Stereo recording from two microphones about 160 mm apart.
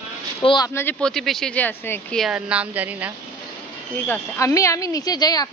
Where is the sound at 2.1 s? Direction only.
5° right (ahead or behind).